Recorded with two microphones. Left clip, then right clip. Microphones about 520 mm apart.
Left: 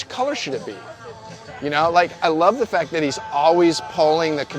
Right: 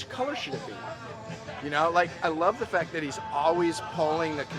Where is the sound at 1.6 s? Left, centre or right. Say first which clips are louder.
Left 8 dB; left.